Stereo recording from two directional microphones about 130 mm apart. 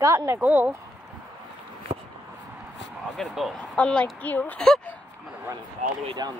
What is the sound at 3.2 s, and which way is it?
A woman's voice, 5° left (ahead or behind).